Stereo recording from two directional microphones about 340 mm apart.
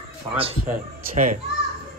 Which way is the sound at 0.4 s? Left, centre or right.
Centre.